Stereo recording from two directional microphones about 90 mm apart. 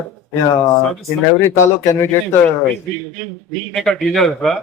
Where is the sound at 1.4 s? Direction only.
30° left (ahead or behind).